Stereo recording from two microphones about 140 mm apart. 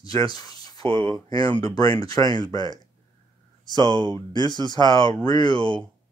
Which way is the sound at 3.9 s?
30° left (ahead or behind).